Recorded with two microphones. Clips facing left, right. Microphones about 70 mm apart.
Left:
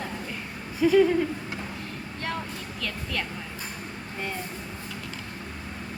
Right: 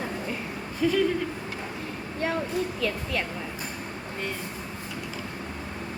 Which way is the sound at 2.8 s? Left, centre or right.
Centre.